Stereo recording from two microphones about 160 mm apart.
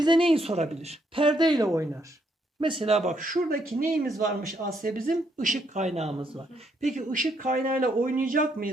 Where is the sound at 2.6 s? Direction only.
35° right (ahead or behind).